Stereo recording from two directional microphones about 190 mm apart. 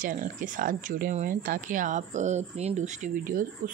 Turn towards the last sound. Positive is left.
turn(degrees=-45)  # may be behind; listen again after turning